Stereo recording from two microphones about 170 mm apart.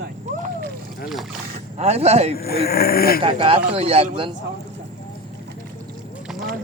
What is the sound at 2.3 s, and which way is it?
Speech, 65° left (ahead or behind).